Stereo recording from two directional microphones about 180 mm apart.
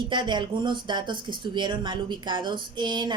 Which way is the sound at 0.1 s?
25° right (ahead or behind).